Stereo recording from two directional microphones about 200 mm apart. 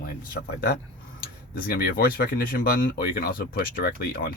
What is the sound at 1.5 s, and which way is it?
Speech, 50° left (ahead or behind).